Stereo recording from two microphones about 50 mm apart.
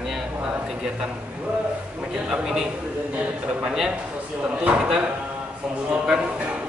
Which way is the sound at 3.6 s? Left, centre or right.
Centre.